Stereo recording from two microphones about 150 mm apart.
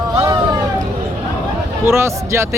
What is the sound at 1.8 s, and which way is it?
Speech, 15° right (ahead or behind).